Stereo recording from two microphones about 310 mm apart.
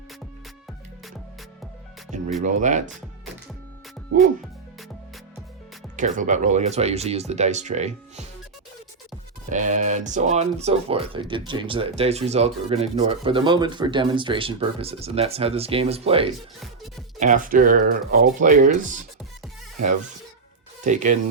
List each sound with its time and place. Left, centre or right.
2.0 s music: right
2.4 s speech: right
6.0 s speech: right
9.5 s speech: right
20.8 s speech: right